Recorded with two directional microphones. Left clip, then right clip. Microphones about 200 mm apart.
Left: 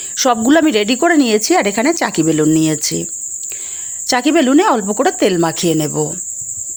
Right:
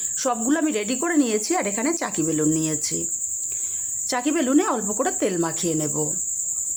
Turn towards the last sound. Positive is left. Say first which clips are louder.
# left 9 dB
turn(degrees=35)  # may be behind; listen again after turning